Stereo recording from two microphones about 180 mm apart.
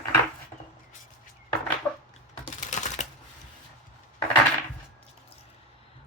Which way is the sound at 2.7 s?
40° left (ahead or behind).